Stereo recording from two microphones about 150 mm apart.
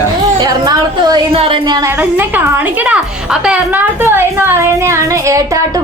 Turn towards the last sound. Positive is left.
turn(degrees=-20)  # may be behind; listen again after turning